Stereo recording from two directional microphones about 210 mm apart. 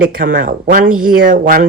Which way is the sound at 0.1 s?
40° right (ahead or behind).